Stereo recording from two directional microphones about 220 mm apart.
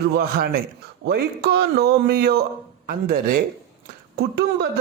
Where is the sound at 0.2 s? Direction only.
45° right (ahead or behind).